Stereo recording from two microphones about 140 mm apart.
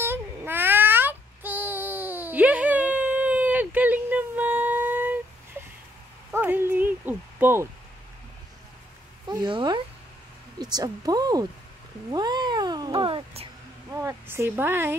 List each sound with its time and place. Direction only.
0.0 s cat: 15° right (ahead or behind)
6.3 s a sound: 15° right (ahead or behind)
9.3 s speech: 35° right (ahead or behind)
12.1 s cat: 30° right (ahead or behind)
13.9 s speech: 20° right (ahead or behind)